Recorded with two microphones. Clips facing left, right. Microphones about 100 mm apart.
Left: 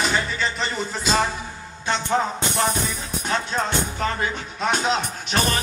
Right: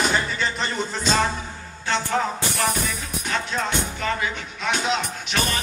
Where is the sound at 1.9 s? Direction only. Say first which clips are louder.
Left 1 dB; 25° left (ahead or behind).